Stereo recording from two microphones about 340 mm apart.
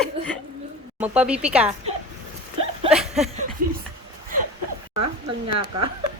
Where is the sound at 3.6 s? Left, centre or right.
Right.